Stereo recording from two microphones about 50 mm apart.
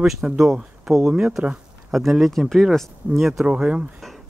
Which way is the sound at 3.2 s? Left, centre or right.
Centre.